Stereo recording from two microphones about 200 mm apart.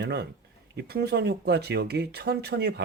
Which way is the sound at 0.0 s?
55° right (ahead or behind).